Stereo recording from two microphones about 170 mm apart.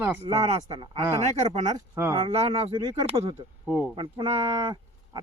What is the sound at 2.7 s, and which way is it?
Speech, 25° right (ahead or behind).